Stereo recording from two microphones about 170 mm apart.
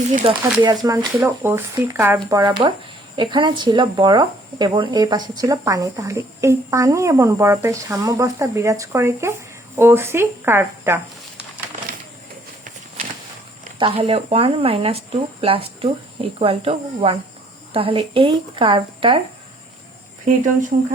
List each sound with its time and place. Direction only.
0.2 s speech: 35° right (ahead or behind)
0.6 s speech: 25° right (ahead or behind)
13.7 s speech: 35° right (ahead or behind)